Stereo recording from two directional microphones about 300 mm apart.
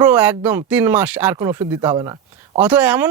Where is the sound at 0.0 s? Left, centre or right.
Centre.